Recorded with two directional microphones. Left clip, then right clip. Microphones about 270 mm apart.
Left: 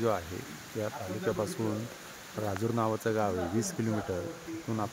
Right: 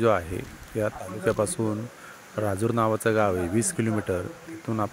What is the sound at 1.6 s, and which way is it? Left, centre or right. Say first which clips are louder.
Speech: right 5 dB; right.